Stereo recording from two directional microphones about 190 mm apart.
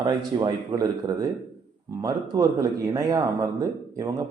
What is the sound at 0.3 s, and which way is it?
A man's voice, 20° right (ahead or behind).